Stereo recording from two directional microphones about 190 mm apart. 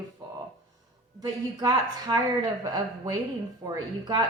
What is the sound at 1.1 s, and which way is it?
A woman's voice, 20° right (ahead or behind).